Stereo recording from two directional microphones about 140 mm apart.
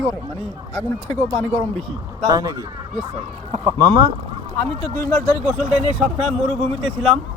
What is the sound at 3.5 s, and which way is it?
Speech, 45° right (ahead or behind).